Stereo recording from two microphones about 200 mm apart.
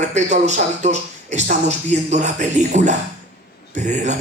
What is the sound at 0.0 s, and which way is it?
Speech, 35° right (ahead or behind).